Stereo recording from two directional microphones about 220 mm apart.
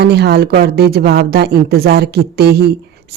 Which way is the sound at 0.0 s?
50° right (ahead or behind).